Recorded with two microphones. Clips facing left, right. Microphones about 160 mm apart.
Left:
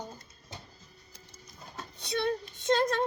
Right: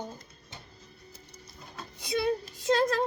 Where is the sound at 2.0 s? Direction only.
10° right (ahead or behind).